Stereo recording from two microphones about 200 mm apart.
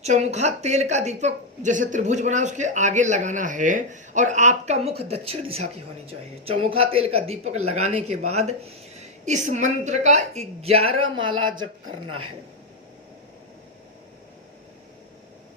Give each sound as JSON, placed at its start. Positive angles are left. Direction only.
{"t": 0.0, "sound": "speech", "side_deg": -35}